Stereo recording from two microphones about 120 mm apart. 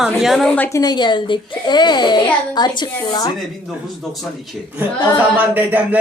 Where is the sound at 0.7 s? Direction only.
35° left (ahead or behind).